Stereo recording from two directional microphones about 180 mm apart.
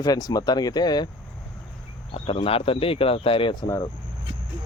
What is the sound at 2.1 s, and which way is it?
Speech, 30° left (ahead or behind).